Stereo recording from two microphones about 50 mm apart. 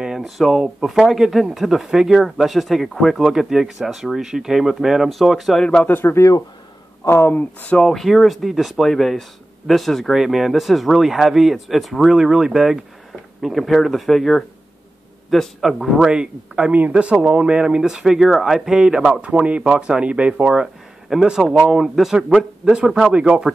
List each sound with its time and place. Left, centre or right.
0.2 s speech: centre
5.5 s speech: centre
5.9 s speech: left
7.3 s speech: left
7.8 s speech: centre
12.2 s speech: centre
13.4 s speech: centre
15.6 s speech: centre
16.1 s speech: centre
19.2 s speech: right
20.6 s speech: centre